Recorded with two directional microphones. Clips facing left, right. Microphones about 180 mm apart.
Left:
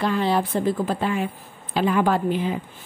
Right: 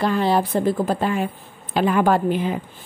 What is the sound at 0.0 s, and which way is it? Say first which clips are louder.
A woman's voice: right 2 dB; 40° right (ahead or behind).